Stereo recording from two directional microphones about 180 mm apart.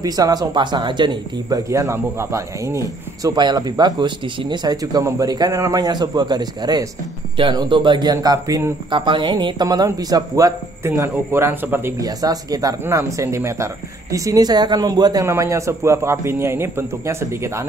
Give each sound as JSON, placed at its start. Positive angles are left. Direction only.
{"t": 0.0, "sound": "a man's voice", "side_deg": -20}